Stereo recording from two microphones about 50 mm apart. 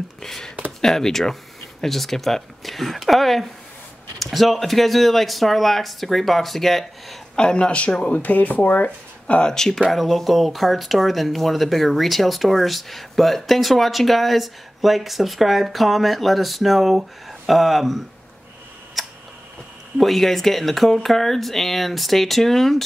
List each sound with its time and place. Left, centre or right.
0.2 s speech: centre
7.3 s speech: centre
9.4 s speech: centre
19.0 s tick: centre
20.0 s speech: centre